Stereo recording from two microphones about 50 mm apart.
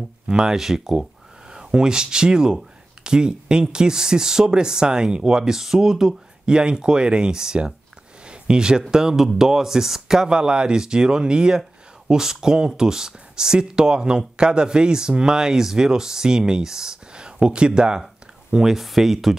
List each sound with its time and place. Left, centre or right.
0.3 s speech: centre